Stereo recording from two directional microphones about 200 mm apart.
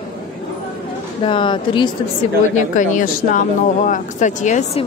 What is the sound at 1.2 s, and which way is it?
Speech, 25° left (ahead or behind).